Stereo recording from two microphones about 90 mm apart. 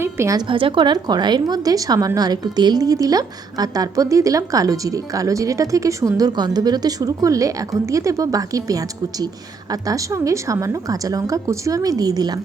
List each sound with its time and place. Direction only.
0.0 s a woman's voice: 30° right (ahead or behind)
0.3 s a woman's voice: 70° right (ahead or behind)
0.9 s a woman's voice: 50° right (ahead or behind)